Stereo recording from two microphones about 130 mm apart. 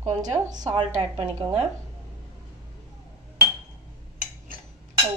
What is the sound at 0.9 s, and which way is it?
Speech, 55° right (ahead or behind).